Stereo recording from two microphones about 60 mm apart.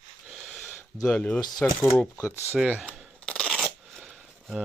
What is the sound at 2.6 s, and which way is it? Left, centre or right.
Speech, centre.